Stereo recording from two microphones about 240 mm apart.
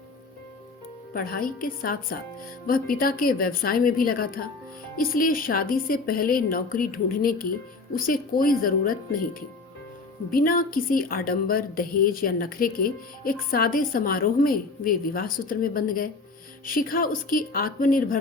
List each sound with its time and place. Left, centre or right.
1.1 s a woman's voice: left